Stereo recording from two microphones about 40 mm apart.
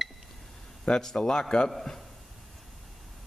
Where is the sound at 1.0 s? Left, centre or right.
Centre.